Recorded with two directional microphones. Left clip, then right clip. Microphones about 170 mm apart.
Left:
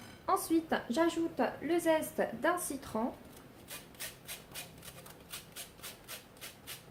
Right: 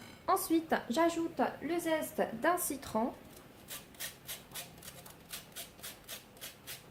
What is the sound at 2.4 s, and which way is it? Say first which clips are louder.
Speech: right 1 dB; 35° right (ahead or behind).